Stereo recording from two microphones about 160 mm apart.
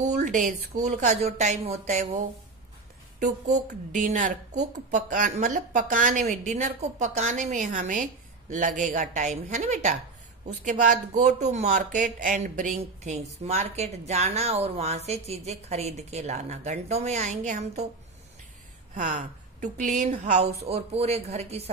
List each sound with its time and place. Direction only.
0.0 s speech: 50° right (ahead or behind)
18.9 s speech: 55° right (ahead or behind)